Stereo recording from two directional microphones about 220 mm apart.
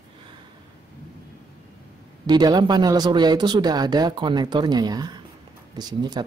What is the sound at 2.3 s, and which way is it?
Speech, 20° right (ahead or behind).